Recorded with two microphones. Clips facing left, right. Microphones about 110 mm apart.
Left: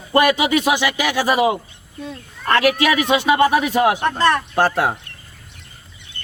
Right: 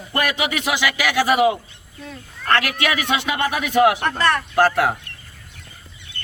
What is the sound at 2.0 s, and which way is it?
Speech, 25° left (ahead or behind).